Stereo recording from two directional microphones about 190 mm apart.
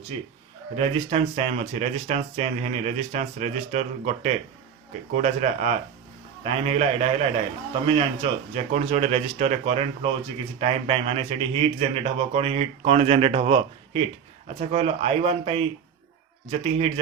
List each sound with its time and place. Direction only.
0.1 s a man's voice: 35° right (ahead or behind)